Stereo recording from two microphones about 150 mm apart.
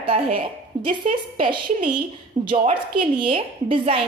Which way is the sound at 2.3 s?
60° right (ahead or behind).